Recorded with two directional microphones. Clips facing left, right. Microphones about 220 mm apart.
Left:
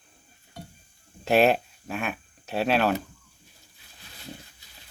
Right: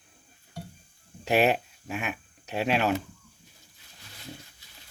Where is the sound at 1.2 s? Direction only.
15° right (ahead or behind).